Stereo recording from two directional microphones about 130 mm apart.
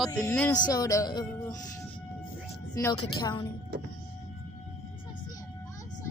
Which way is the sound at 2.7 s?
30° left (ahead or behind).